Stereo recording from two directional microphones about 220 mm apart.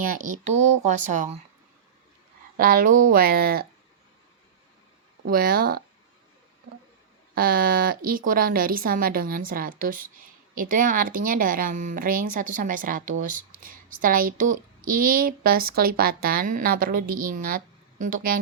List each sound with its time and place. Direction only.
0.1 s a woman's voice: 35° right (ahead or behind)
2.6 s a woman's voice: 40° right (ahead or behind)
5.2 s a woman's voice: 40° right (ahead or behind)
7.3 s a woman's voice: 40° right (ahead or behind)